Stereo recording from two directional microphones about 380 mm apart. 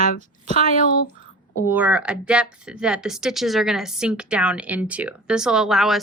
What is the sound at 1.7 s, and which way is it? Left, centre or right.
Speech, centre.